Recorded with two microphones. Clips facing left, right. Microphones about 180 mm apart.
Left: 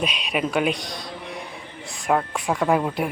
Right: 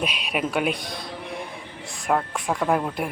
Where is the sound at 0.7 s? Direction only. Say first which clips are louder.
Left 1 dB; 55° right (ahead or behind).